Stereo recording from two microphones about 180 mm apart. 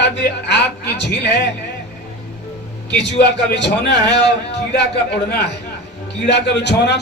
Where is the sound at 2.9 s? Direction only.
70° left (ahead or behind).